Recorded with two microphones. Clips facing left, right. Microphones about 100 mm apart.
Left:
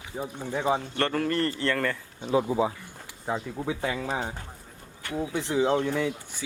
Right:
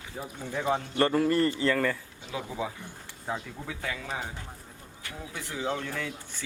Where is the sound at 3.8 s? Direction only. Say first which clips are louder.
Left 3 dB; 30° left (ahead or behind).